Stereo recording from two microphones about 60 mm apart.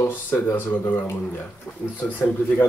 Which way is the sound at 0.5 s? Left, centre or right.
Left.